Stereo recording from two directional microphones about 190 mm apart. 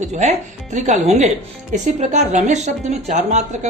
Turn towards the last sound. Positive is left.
turn(degrees=-35)  # may be behind; listen again after turning